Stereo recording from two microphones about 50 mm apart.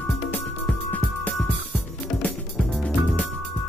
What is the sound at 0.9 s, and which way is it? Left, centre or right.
Music, left.